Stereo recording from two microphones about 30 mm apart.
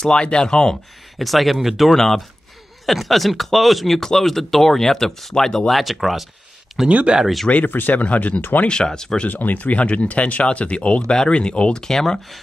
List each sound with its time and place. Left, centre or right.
0.0 s speech: left
1.1 s speech: centre
1.9 s speech: centre
5.7 s speech: centre
7.6 s speech: left
8.4 s speech: left
8.6 s speech: left
9.3 s speech: left
11.7 s speech: centre